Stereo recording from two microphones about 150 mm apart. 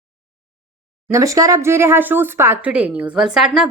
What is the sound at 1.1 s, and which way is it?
Speech, 20° right (ahead or behind).